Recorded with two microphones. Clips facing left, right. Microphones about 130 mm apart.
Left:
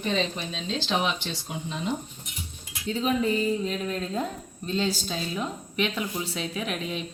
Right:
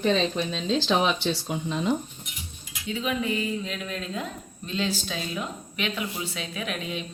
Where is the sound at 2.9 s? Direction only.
35° left (ahead or behind).